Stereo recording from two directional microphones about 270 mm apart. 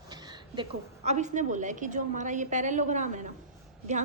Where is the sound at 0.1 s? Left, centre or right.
Centre.